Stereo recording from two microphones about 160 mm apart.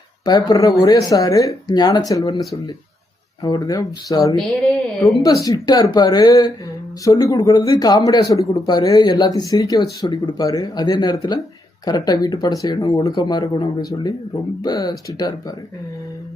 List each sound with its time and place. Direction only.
0.3 s a man's voice: 25° left (ahead or behind)
3.4 s a man's voice: 20° left (ahead or behind)